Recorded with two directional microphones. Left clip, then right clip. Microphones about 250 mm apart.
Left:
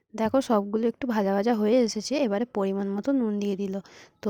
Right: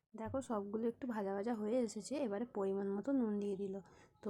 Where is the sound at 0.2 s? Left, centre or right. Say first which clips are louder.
Left 18 dB; left.